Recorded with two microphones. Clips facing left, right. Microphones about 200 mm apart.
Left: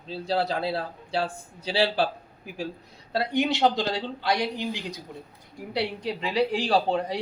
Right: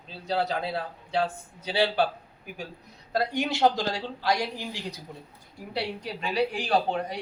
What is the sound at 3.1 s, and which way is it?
Speech, 25° left (ahead or behind).